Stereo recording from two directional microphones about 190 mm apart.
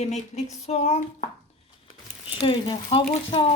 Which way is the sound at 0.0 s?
35° left (ahead or behind).